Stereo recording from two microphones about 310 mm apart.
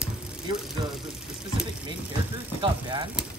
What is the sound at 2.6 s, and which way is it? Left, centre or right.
Speech, centre.